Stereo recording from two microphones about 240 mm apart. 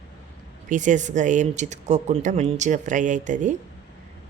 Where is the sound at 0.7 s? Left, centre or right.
Right.